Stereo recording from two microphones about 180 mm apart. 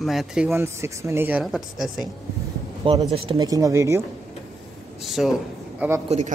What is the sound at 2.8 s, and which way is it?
Speech, 30° right (ahead or behind).